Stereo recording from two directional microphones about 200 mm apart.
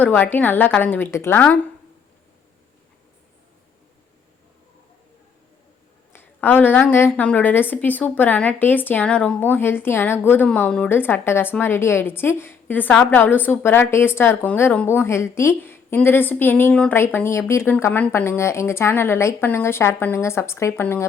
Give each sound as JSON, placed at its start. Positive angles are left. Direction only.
{"t": 0.0, "sound": "a woman's voice", "side_deg": 10}
{"t": 6.1, "sound": "a woman's voice", "side_deg": 10}